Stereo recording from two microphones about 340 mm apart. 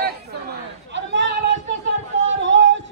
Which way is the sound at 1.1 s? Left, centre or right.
Right.